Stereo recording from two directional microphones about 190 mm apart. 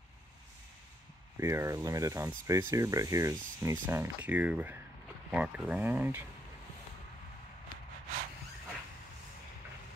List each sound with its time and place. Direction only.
1.4 s speech: 15° right (ahead or behind)